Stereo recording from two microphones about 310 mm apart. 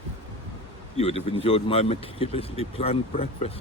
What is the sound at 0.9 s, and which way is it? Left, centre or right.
Speech, centre.